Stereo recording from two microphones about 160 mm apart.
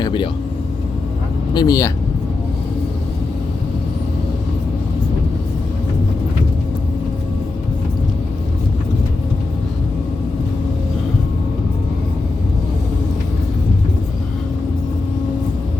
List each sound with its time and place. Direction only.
0.0 s vehicle: 30° left (ahead or behind)
1.5 s speech: 25° left (ahead or behind)